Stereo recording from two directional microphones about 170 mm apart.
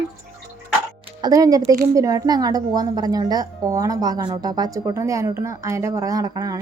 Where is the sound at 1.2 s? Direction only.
20° right (ahead or behind).